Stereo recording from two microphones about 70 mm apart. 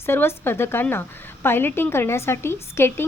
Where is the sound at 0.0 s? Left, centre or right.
Left.